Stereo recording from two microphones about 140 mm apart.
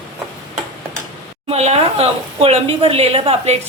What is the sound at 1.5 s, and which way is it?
Speech, 50° right (ahead or behind).